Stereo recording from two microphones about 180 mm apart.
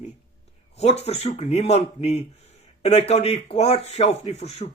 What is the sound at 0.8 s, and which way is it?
A man's voice, 35° left (ahead or behind).